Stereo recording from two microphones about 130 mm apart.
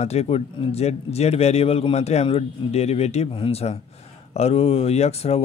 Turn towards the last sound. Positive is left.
turn(degrees=50)  # may be behind; listen again after turning